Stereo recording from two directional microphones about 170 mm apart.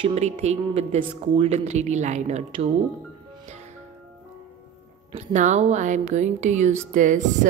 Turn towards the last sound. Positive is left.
turn(degrees=-50)  # may be behind; listen again after turning